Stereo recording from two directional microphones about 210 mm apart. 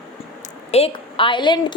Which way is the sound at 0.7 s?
25° left (ahead or behind).